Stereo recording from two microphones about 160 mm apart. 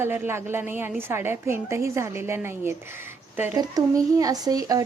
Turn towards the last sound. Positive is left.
turn(degrees=-25)  # may be behind; listen again after turning